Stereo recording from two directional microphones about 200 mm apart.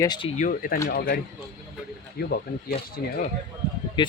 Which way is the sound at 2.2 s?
50° left (ahead or behind).